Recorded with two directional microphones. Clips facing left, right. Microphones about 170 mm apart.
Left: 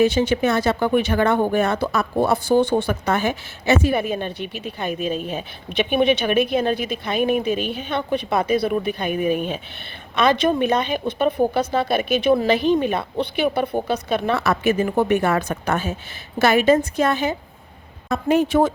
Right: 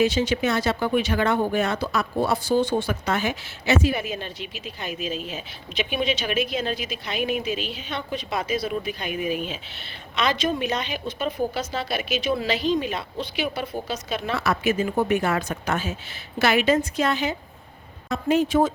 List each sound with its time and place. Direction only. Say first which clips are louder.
0.0 s speech: left 4 dB; 55° left (ahead or behind)
10.2 s a woman's voice: left 6 dB; 55° left (ahead or behind)